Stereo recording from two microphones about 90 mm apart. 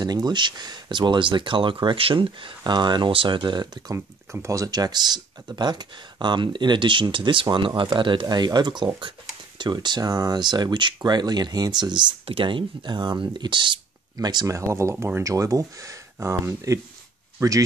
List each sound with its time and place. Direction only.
0.0 s speech: 50° right (ahead or behind); by 2.5 s 80° right
2.6 s speech: 55° right (ahead or behind)
3.9 s speech: 30° right (ahead or behind); by 13.7 s 60° right (ahead or behind)
14.1 s speech: 50° right (ahead or behind)
14.5 s speech: 30° right (ahead or behind)